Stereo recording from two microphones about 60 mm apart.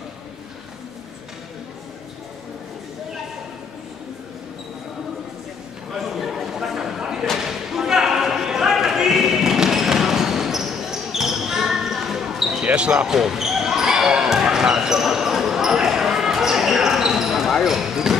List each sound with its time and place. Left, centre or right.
5.9 s a sound: centre
12.6 s speech: centre
13.1 s basketball bounce: centre